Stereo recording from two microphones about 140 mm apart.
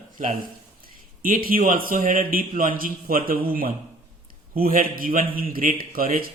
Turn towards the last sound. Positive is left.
turn(degrees=-90)